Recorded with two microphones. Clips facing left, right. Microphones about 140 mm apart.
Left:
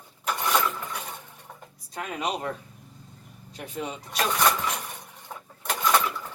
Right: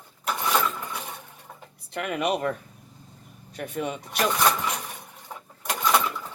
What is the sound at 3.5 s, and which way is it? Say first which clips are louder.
Speech: right 4 dB; 60° right (ahead or behind).